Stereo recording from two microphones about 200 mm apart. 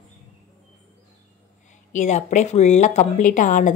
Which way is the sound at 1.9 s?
35° left (ahead or behind).